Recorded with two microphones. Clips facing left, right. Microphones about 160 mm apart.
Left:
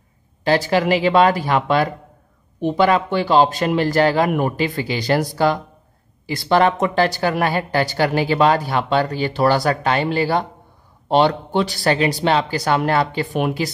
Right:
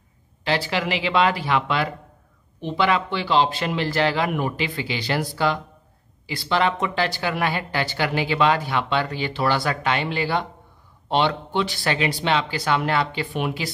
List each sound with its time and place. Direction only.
0.4 s speech: 40° left (ahead or behind)